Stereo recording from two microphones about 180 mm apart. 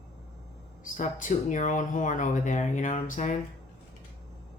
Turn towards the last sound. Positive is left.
turn(degrees=45)  # may be behind; listen again after turning